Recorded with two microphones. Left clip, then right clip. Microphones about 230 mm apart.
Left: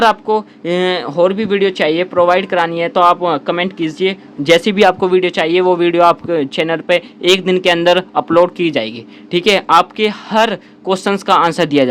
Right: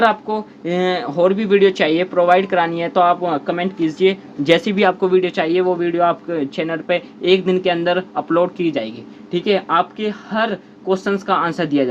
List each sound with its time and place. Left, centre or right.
0.0 s speech: left